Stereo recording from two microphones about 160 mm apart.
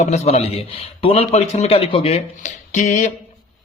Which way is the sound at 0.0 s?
45° left (ahead or behind).